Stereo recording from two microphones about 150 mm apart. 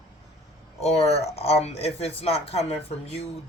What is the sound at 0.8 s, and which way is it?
Speech, 45° left (ahead or behind).